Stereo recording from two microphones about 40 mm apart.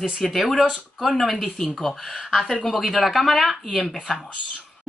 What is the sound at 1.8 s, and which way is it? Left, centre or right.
Speech, centre.